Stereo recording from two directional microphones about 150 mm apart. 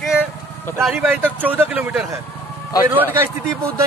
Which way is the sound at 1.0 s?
10° right (ahead or behind).